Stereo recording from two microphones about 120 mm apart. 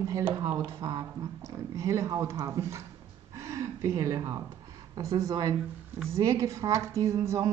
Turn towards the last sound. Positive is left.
turn(degrees=-25)  # may be behind; listen again after turning